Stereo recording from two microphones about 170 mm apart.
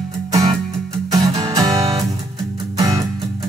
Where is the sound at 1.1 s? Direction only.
20° right (ahead or behind).